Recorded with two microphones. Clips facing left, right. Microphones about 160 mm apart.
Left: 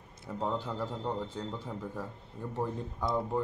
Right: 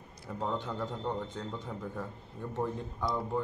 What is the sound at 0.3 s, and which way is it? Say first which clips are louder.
A man's voice: left 1 dB; 5° left (ahead or behind).